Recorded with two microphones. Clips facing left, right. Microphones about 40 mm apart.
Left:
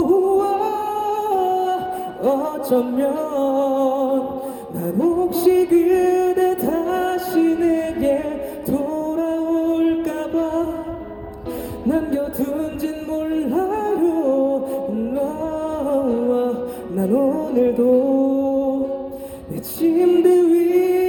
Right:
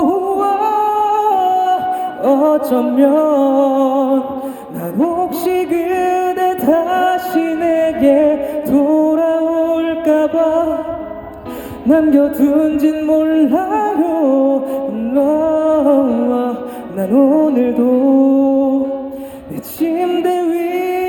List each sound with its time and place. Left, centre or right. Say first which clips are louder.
0.0 s humming: right 2 dB; right
4.9 s music: right 3 dB; right
11.9 s music: right 10 dB; right